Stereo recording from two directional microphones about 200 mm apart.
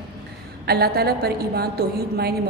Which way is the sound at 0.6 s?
50° right (ahead or behind).